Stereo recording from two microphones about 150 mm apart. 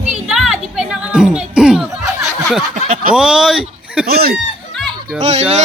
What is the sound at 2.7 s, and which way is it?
Snicker, 60° right (ahead or behind).